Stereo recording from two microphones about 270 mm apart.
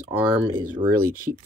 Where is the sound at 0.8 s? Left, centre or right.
Centre.